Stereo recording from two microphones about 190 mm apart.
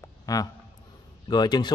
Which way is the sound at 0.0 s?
20° left (ahead or behind).